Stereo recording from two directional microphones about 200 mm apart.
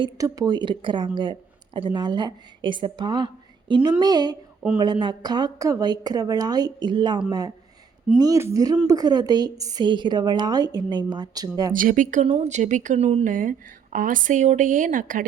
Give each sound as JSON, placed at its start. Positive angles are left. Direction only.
{"t": 0.0, "sound": "speech", "side_deg": -20}
{"t": 11.7, "sound": "speech", "side_deg": -40}